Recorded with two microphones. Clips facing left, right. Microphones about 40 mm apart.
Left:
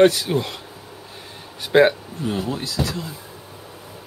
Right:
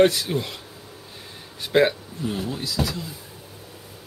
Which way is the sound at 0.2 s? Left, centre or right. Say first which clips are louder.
Left 4 dB; centre.